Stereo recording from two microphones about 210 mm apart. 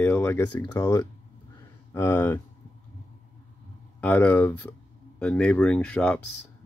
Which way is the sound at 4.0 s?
5° left (ahead or behind).